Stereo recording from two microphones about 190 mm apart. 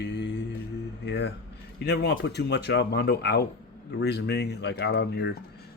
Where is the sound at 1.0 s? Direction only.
65° left (ahead or behind).